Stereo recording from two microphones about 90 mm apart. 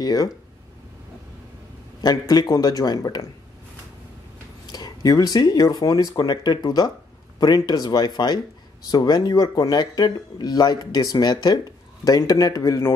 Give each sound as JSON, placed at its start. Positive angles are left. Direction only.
{"t": 0.0, "sound": "speech", "side_deg": 45}
{"t": 2.0, "sound": "speech", "side_deg": 50}
{"t": 4.6, "sound": "speech", "side_deg": 50}